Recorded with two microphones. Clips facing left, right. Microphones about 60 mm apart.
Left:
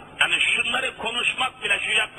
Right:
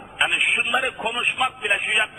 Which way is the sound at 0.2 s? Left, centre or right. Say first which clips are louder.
Right 1 dB; centre.